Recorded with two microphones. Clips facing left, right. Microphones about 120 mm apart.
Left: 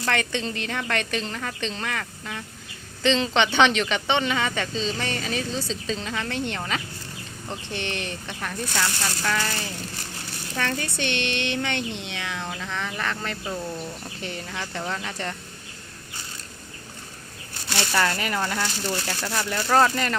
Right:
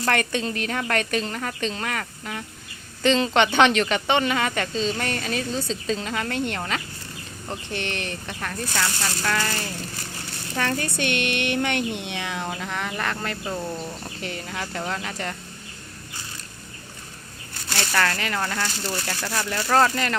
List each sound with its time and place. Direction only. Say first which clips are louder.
0.0 s speech: right 2 dB; 15° right (ahead or behind); by 9.6 s centre (ahead or behind)
10.5 s speech: right 2 dB; 10° right (ahead or behind)
14.2 s speech: right 1 dB; centre (ahead or behind)
17.7 s speech: even; 15° left (ahead or behind)